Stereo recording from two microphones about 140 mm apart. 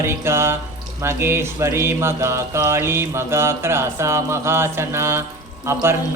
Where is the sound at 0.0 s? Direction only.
15° right (ahead or behind).